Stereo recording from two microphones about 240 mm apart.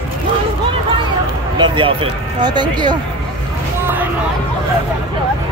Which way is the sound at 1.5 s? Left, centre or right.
Centre.